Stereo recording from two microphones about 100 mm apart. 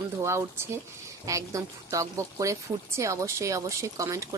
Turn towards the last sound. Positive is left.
turn(degrees=-35)  # may be behind; listen again after turning